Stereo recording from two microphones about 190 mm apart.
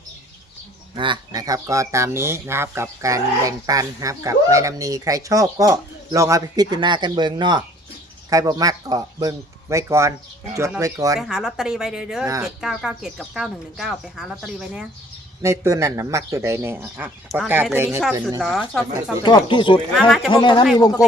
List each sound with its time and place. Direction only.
0.9 s speech: 25° right (ahead or behind)
11.2 s speech: centre (ahead or behind)
12.2 s speech: 15° right (ahead or behind)
12.5 s speech: centre (ahead or behind)
15.4 s speech: 15° right (ahead or behind)
17.2 s speech: centre (ahead or behind)
19.2 s speech: 25° left (ahead or behind)
20.1 s speech: centre (ahead or behind)
20.3 s speech: 25° left (ahead or behind)